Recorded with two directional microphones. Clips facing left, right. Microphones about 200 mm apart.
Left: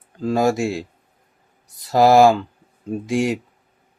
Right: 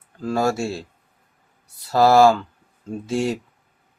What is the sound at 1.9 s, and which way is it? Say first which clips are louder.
Speech: left 2 dB; 15° left (ahead or behind).